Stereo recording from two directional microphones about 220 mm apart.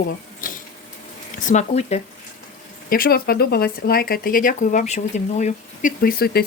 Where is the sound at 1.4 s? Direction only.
30° left (ahead or behind).